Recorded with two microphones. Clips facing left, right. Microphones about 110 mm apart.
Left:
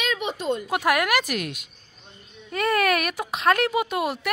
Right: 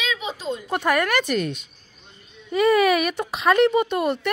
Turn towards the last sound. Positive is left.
turn(degrees=5)  # may be behind; listen again after turning